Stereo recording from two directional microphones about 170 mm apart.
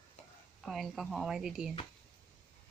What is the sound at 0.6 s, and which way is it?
A woman's voice, centre (ahead or behind).